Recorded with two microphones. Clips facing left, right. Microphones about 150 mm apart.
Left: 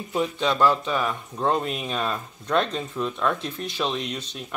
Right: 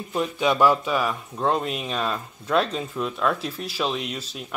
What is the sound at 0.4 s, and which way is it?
Speech, 10° right (ahead or behind).